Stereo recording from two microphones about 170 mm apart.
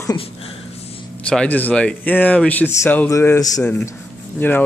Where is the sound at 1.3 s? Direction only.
5° left (ahead or behind).